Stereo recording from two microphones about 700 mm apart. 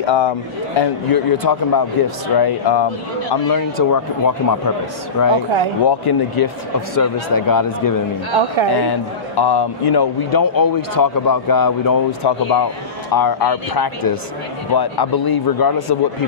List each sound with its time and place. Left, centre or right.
0.0 s a man's voice: left
0.7 s a man's voice: left